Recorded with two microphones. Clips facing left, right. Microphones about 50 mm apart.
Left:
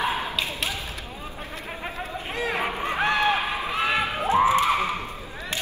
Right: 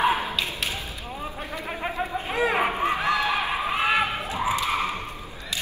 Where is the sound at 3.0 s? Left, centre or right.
Left.